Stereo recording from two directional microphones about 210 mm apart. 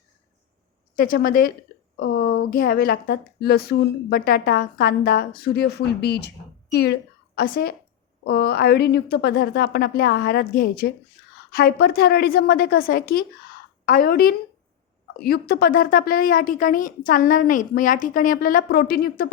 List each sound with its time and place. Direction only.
0.9 s a woman's voice: 45° left (ahead or behind)